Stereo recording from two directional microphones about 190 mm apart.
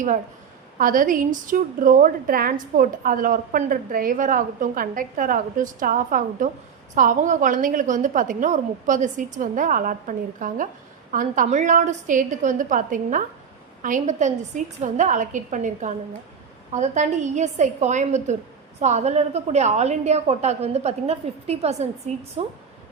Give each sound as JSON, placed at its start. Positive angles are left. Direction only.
{"t": 0.8, "sound": "a woman's voice", "side_deg": -45}